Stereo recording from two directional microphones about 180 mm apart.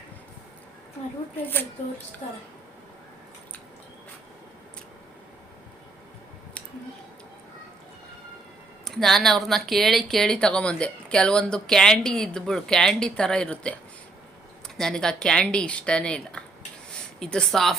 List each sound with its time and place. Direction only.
2.2 s speech: 35° left (ahead or behind)
8.8 s speech: centre (ahead or behind)
14.8 s speech: 5° left (ahead or behind)